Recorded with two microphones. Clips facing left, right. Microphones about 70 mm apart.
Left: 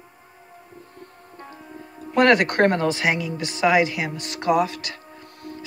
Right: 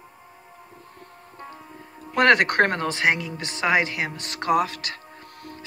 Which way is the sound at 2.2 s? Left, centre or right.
Right.